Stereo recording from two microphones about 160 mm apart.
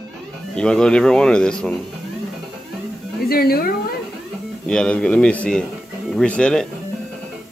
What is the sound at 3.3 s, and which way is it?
Speech, 70° left (ahead or behind).